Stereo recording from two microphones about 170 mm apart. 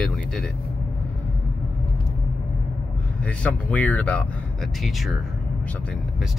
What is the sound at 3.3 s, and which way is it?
Speech, 10° left (ahead or behind).